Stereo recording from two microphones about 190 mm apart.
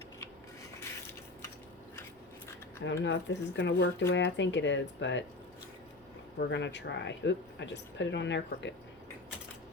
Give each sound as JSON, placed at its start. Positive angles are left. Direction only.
{"t": 2.8, "sound": "speech", "side_deg": 65}
{"t": 6.4, "sound": "speech", "side_deg": 65}